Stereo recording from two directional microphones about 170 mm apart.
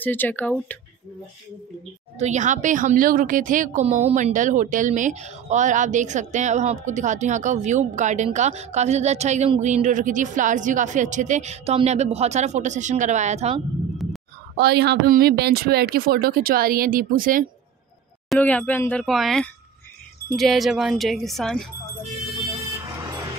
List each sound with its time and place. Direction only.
0.0 s speech: 10° left (ahead or behind)
2.1 s speech: 45° right (ahead or behind)
14.6 s speech: 70° right (ahead or behind); by 17.5 s 55° right (ahead or behind)
18.3 s speech: 10° left (ahead or behind)